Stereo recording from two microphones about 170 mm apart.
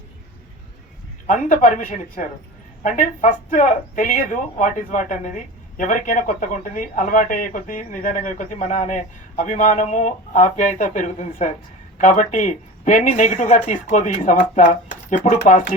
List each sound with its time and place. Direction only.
1.3 s speech: 50° left (ahead or behind)